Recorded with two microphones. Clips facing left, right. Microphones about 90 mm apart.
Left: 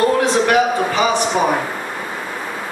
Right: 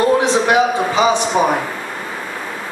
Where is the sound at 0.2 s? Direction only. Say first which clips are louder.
Right 1 dB; 20° right (ahead or behind).